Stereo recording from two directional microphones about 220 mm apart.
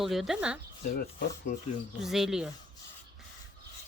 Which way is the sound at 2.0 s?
Centre (ahead or behind).